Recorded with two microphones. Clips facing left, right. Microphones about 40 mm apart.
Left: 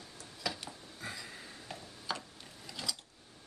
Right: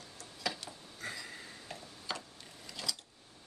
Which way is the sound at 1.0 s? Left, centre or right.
Centre.